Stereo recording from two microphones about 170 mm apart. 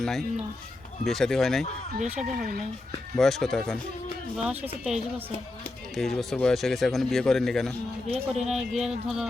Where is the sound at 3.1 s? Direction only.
Centre (ahead or behind).